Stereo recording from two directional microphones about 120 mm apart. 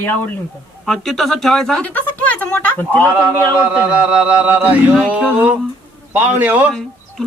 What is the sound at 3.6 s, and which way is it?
Speech, 10° right (ahead or behind).